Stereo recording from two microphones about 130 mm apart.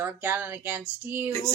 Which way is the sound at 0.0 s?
15° right (ahead or behind).